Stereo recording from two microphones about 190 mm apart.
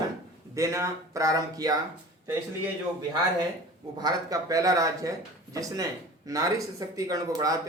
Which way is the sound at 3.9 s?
20° right (ahead or behind).